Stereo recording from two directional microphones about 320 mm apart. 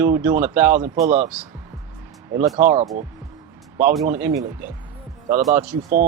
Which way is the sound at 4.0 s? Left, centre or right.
Centre.